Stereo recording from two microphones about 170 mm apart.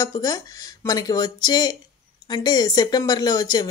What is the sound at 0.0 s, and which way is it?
Speech, 20° left (ahead or behind).